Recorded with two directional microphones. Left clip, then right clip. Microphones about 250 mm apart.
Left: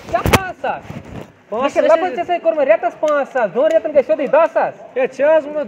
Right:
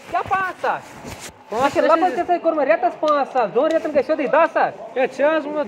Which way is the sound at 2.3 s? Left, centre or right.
Right.